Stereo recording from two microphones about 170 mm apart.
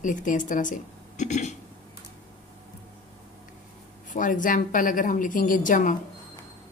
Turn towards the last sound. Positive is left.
turn(degrees=50)  # may be behind; listen again after turning